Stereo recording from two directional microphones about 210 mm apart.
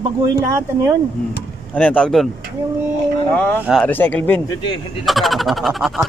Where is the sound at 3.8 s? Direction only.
10° left (ahead or behind).